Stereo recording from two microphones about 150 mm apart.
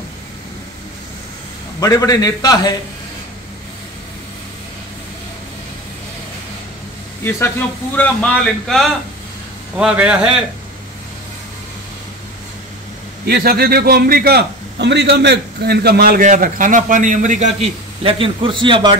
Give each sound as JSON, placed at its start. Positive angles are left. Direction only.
{"t": 1.8, "sound": "a man's voice", "side_deg": 25}
{"t": 7.2, "sound": "a man's voice", "side_deg": 15}
{"t": 9.8, "sound": "a man's voice", "side_deg": -10}
{"t": 13.3, "sound": "a man's voice", "side_deg": -90}
{"t": 16.3, "sound": "a man's voice", "side_deg": -65}
{"t": 18.0, "sound": "a man's voice", "side_deg": -35}